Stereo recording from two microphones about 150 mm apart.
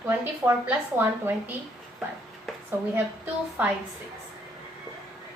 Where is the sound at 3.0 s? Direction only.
10° right (ahead or behind).